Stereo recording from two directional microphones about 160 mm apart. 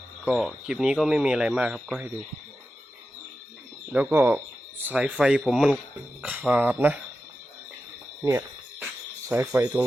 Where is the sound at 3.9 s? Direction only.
10° right (ahead or behind).